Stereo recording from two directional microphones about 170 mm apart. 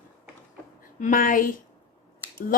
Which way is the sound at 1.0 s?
50° left (ahead or behind).